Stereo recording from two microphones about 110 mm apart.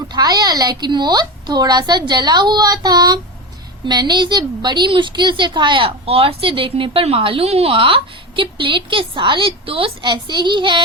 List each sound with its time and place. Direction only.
0.1 s a woman's voice: 35° right (ahead or behind)